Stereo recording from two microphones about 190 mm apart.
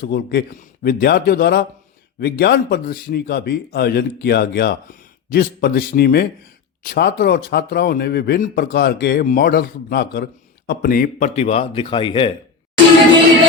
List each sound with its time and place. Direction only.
0.0 s a man's voice: 55° left (ahead or behind); by 12.3 s 25° left (ahead or behind)